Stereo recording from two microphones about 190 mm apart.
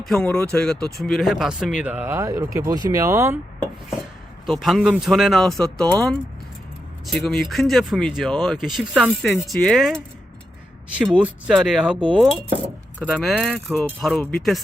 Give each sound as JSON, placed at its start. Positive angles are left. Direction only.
{"t": 0.0, "sound": "speech", "side_deg": 5}
{"t": 4.4, "sound": "speech", "side_deg": 0}
{"t": 11.2, "sound": "speech", "side_deg": -5}
{"t": 13.7, "sound": "speech", "side_deg": 10}